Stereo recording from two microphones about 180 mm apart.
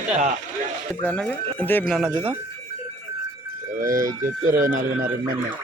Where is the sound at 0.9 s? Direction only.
5° left (ahead or behind).